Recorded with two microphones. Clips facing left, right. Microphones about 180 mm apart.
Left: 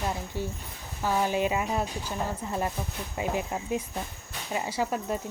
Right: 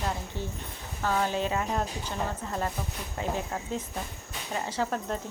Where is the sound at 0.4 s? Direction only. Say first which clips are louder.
Left 2 dB; 10° left (ahead or behind).